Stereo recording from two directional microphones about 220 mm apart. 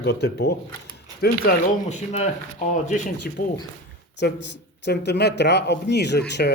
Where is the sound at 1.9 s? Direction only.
30° left (ahead or behind).